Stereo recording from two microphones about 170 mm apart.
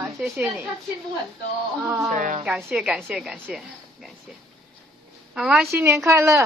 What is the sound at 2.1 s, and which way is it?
Speech, 50° right (ahead or behind).